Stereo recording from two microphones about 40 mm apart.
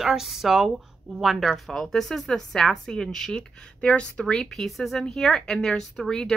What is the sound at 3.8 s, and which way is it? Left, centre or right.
Speech, left.